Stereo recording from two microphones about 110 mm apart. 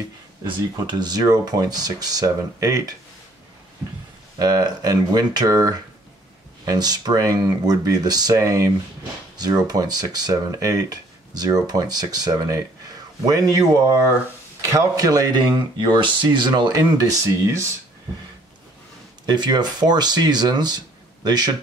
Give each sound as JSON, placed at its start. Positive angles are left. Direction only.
{"t": 0.5, "sound": "speech", "side_deg": -40}
{"t": 4.4, "sound": "speech", "side_deg": -35}
{"t": 16.7, "sound": "speech", "side_deg": -30}
{"t": 19.2, "sound": "speech", "side_deg": -40}